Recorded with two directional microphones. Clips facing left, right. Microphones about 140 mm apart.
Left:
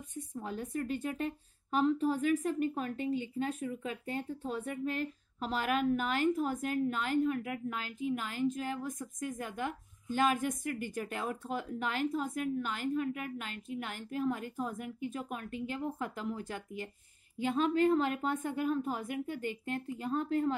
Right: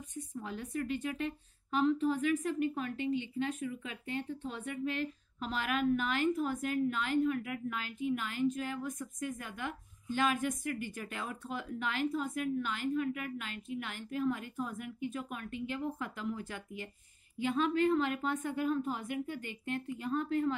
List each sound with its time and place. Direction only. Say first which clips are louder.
0.4 s a woman's voice: left 1 dB; 40° left (ahead or behind)